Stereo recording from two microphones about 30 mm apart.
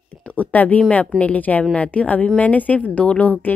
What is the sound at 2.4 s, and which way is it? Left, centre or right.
Speech, left.